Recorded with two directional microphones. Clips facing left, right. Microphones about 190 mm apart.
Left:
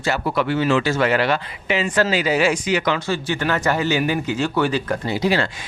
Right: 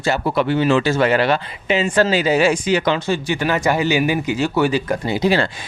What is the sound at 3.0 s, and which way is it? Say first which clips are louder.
A man's voice: right 2 dB; 15° right (ahead or behind).